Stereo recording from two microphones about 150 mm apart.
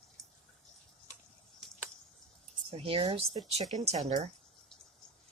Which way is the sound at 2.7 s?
40° right (ahead or behind).